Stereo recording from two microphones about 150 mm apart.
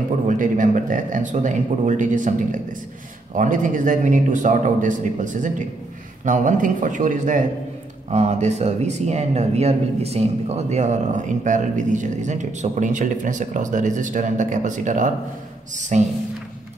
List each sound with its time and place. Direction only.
0.3 s speech: 60° right (ahead or behind)